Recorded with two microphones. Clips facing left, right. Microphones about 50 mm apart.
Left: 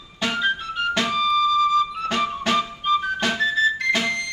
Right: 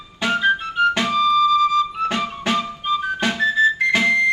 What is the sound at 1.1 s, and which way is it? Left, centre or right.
Music, centre.